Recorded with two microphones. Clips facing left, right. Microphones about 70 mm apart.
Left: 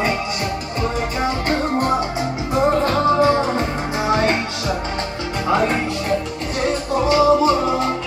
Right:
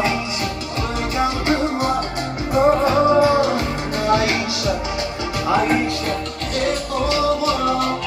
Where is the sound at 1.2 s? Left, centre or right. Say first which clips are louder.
Right 2 dB; left.